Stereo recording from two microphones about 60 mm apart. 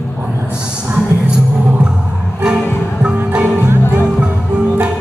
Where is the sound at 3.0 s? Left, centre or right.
Centre.